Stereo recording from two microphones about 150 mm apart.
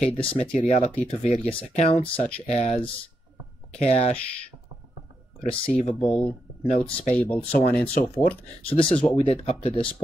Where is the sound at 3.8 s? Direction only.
45° left (ahead or behind).